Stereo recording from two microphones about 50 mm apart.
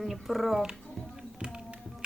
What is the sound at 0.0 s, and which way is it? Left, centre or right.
Speech, centre.